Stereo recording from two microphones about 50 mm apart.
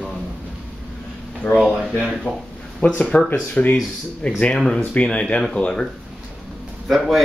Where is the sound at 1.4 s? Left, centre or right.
Left.